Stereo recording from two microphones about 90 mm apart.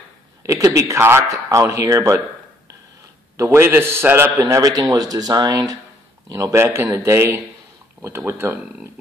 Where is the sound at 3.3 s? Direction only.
30° right (ahead or behind).